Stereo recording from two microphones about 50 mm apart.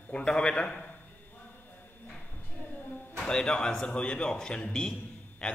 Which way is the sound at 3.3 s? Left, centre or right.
Centre.